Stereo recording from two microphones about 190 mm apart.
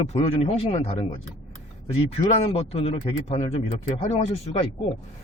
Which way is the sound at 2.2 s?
30° left (ahead or behind).